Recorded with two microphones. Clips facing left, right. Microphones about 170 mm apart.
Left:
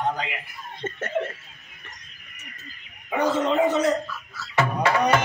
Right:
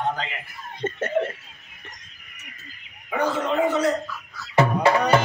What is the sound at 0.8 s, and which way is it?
Speech, 30° right (ahead or behind).